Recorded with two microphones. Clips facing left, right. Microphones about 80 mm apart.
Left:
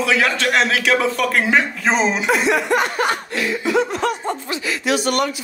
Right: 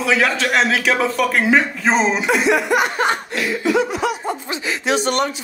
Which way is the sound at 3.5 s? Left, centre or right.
Centre.